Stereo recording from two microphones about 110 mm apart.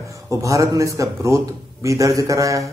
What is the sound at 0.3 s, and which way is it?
A man's voice, 30° right (ahead or behind).